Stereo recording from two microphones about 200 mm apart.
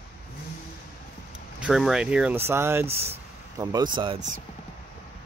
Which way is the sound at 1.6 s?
Centre (ahead or behind).